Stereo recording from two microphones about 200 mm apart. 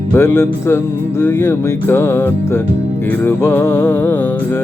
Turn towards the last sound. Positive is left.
turn(degrees=10)  # may be behind; listen again after turning